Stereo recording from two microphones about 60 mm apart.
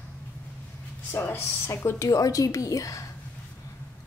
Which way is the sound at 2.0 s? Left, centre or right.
Left.